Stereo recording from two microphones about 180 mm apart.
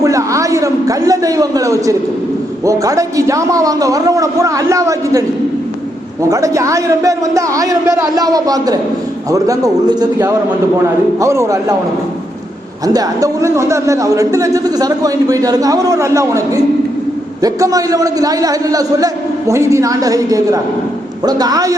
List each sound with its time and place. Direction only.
0.0 s a man's voice: 15° right (ahead or behind)
6.2 s a man's voice: 20° right (ahead or behind)
12.8 s a man's voice: 20° right (ahead or behind)